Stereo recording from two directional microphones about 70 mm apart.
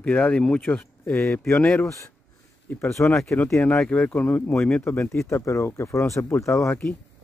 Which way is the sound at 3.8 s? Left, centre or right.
Centre.